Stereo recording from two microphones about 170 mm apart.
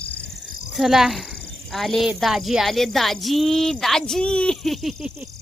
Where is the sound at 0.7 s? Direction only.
Centre (ahead or behind).